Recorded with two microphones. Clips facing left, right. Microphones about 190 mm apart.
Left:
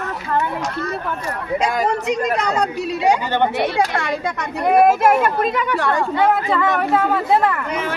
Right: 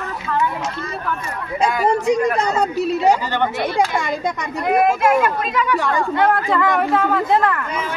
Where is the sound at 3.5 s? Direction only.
65° left (ahead or behind).